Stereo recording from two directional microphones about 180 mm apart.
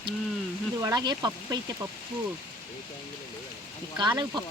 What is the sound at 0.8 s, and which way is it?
Speech, 20° right (ahead or behind).